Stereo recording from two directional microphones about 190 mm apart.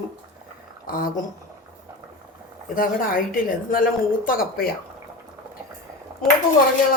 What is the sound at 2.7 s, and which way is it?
A woman's voice, 50° left (ahead or behind).